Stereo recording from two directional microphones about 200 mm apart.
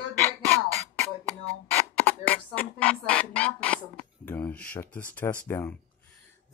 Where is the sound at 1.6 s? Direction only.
10° left (ahead or behind).